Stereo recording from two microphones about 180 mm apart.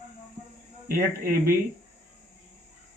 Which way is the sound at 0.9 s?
55° right (ahead or behind).